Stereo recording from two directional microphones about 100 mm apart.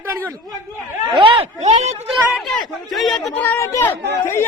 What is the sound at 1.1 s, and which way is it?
Speech, 60° right (ahead or behind).